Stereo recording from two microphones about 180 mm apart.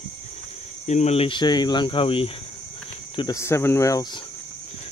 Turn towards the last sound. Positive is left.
turn(degrees=15)  # may be behind; listen again after turning